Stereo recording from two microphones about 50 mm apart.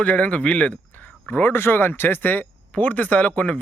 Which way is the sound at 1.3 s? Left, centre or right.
Left.